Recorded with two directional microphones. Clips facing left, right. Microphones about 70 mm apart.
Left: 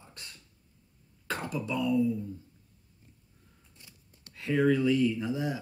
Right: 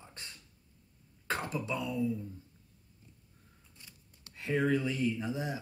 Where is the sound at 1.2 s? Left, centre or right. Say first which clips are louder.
Left 1 dB; right.